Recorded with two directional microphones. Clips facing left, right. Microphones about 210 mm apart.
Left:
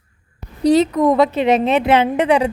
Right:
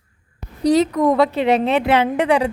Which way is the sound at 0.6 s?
25° left (ahead or behind).